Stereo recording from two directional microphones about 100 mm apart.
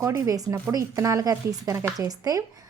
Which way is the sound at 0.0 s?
30° right (ahead or behind).